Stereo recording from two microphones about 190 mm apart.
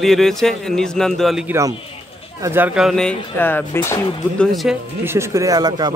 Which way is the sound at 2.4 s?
10° right (ahead or behind).